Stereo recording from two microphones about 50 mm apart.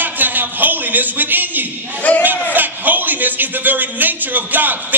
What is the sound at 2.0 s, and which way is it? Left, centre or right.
Speech, left.